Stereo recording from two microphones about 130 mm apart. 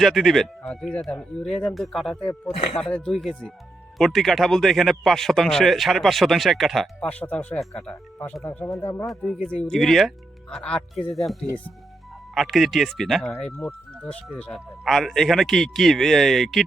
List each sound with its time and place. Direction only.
0.0 s speech: centre (ahead or behind)
2.5 s speech: 50° left (ahead or behind)
2.9 s speech: 5° left (ahead or behind)
7.1 s speech: 10° left (ahead or behind)
9.0 s speech: centre (ahead or behind)
13.4 s speech: 15° left (ahead or behind)